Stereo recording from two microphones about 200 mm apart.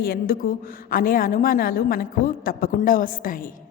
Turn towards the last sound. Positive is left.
turn(degrees=45)  # may be behind; listen again after turning